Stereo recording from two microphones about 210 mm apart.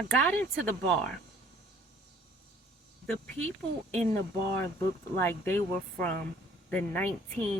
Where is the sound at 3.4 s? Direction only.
65° right (ahead or behind).